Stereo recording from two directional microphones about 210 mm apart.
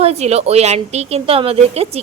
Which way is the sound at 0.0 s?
30° right (ahead or behind).